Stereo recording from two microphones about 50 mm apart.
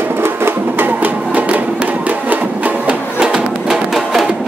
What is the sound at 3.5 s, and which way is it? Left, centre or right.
Music, centre.